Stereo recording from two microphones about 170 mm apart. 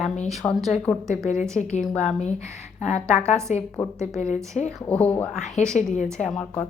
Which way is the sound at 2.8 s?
40° left (ahead or behind).